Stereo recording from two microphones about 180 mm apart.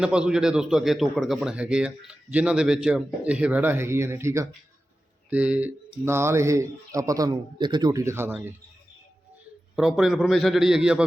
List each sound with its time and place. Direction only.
0.0 s speech: 5° right (ahead or behind)
9.7 s speech: 5° right (ahead or behind)